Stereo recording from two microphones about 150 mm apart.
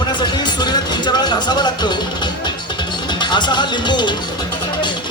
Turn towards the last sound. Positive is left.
turn(degrees=30)  # may be behind; listen again after turning